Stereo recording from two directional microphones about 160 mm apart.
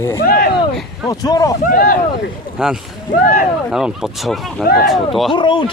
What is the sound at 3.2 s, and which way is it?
Speech, 65° left (ahead or behind).